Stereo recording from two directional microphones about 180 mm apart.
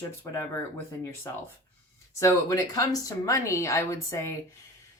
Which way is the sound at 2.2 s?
15° left (ahead or behind).